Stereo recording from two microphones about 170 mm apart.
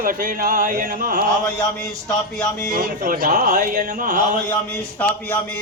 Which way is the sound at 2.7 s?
55° right (ahead or behind).